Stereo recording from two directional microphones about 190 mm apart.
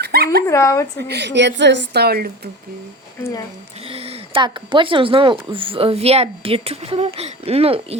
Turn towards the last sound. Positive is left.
turn(degrees=-30)  # may be behind; listen again after turning